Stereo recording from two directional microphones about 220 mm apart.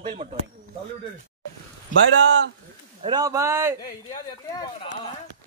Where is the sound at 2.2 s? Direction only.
55° right (ahead or behind).